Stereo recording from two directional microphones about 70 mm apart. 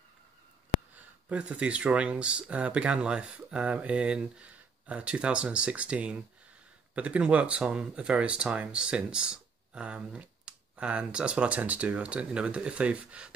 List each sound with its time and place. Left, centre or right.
0.9 s speech: centre